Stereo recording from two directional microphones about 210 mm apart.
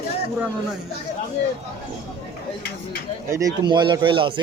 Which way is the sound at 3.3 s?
15° right (ahead or behind).